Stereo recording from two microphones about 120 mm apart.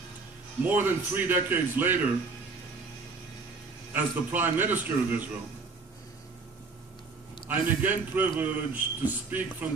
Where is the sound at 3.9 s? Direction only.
15° right (ahead or behind).